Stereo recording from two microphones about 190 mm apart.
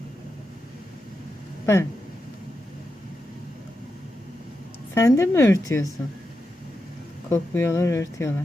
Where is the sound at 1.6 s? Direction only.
15° left (ahead or behind).